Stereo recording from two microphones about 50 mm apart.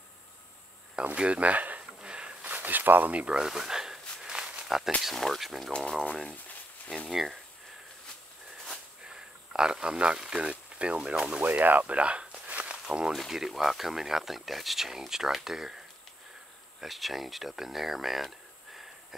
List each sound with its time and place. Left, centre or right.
1.1 s speech: right
2.0 s a sound: right
2.4 s a sound: right
3.3 s a sound: centre
4.6 s speech: centre
5.0 s speech: centre
7.1 s speech: centre
9.0 s a sound: centre
10.1 s speech: centre
10.4 s speech: right
11.4 s speech: right; by 13.1 s centre
13.6 s speech: centre
16.8 s speech: centre